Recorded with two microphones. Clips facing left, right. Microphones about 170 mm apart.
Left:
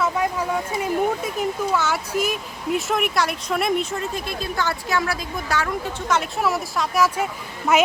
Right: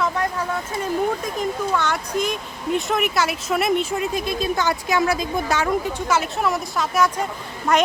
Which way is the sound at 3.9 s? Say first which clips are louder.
Right 4 dB; 15° right (ahead or behind).